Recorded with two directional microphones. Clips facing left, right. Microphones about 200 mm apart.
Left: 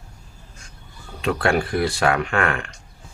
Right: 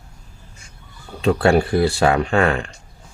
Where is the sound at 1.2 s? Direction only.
30° right (ahead or behind).